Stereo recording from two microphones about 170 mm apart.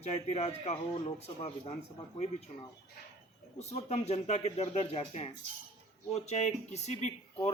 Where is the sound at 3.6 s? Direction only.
40° left (ahead or behind).